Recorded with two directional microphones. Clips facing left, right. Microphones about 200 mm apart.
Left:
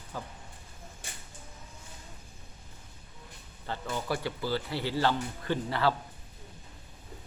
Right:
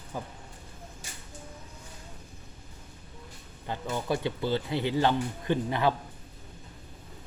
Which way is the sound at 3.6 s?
15° right (ahead or behind).